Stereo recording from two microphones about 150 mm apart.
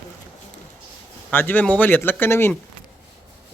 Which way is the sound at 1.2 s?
10° left (ahead or behind).